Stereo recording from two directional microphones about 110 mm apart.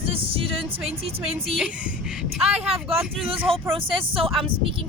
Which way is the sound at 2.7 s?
60° right (ahead or behind).